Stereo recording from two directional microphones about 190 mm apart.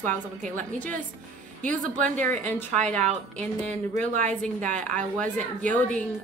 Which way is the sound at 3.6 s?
40° right (ahead or behind).